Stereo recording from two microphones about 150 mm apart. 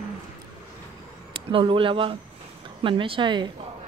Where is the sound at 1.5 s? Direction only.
35° right (ahead or behind).